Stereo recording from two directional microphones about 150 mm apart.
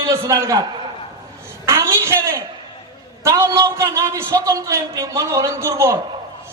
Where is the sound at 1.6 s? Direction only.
20° right (ahead or behind).